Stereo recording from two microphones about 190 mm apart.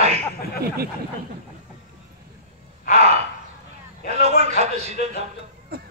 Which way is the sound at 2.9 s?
35° right (ahead or behind).